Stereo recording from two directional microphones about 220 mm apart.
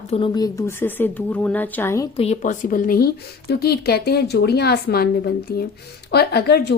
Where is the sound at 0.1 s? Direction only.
20° left (ahead or behind).